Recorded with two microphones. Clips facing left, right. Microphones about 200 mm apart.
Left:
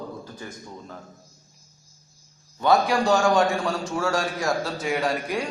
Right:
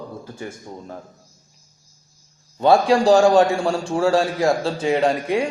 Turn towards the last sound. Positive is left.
turn(degrees=-25)  # may be behind; listen again after turning